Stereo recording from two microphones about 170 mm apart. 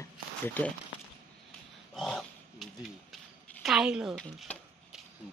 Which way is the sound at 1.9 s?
Centre (ahead or behind).